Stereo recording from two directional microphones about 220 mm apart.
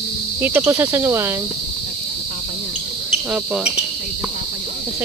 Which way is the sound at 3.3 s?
5° right (ahead or behind).